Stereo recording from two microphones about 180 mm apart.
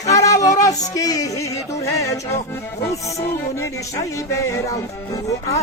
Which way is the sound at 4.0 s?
15° left (ahead or behind).